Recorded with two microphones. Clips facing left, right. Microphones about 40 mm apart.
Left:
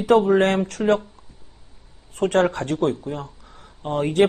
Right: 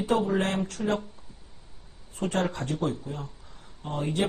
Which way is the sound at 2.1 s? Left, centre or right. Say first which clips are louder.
Left 9 dB; left.